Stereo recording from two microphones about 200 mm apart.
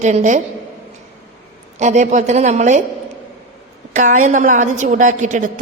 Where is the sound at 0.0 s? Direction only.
35° right (ahead or behind).